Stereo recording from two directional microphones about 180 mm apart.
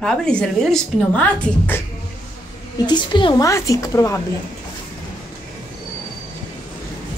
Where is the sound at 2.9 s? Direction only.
25° left (ahead or behind).